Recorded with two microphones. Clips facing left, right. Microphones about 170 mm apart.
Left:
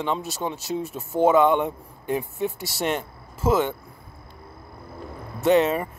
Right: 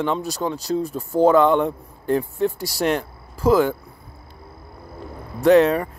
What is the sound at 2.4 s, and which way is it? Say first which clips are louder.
Speech: right 5 dB; centre (ahead or behind).